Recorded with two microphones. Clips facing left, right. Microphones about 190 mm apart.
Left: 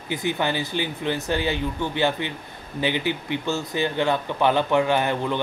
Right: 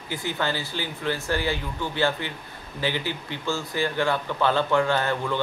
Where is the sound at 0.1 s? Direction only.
20° left (ahead or behind).